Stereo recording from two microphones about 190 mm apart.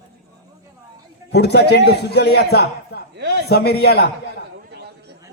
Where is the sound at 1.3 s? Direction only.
60° left (ahead or behind).